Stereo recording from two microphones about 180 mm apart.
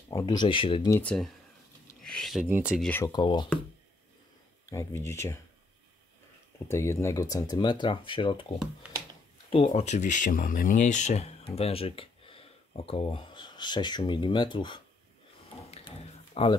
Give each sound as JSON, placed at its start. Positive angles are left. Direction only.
{"t": 0.1, "sound": "speech", "side_deg": 20}
{"t": 0.8, "sound": "speech", "side_deg": 10}
{"t": 2.0, "sound": "a sound", "side_deg": 0}
{"t": 2.4, "sound": "speech", "side_deg": -10}
{"t": 3.1, "sound": "speech", "side_deg": 25}
{"t": 4.6, "sound": "speech", "side_deg": 15}
{"t": 6.7, "sound": "speech", "side_deg": 15}
{"t": 9.8, "sound": "speech", "side_deg": 40}
{"t": 16.4, "sound": "speech", "side_deg": 35}